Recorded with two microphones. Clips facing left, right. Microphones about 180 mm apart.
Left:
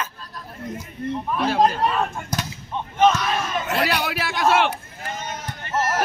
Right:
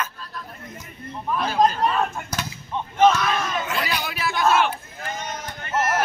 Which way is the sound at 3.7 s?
65° left (ahead or behind).